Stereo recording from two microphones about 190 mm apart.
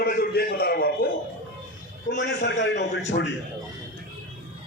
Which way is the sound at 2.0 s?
65° left (ahead or behind).